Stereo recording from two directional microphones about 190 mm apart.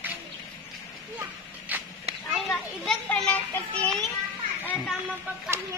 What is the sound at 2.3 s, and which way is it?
Children playing, centre (ahead or behind).